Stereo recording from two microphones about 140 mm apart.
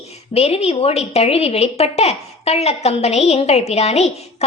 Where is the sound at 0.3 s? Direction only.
45° left (ahead or behind).